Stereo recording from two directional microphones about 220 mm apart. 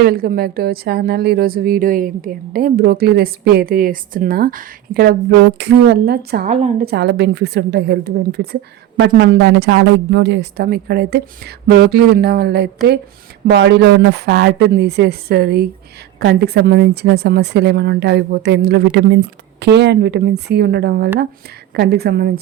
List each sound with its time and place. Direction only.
0.0 s a woman's voice: 40° right (ahead or behind)